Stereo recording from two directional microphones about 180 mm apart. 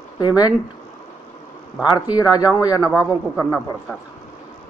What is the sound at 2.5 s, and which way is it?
A man's voice, 20° left (ahead or behind).